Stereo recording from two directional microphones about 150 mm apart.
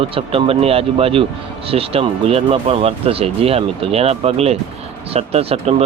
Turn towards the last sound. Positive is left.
turn(degrees=-40)  # may be behind; listen again after turning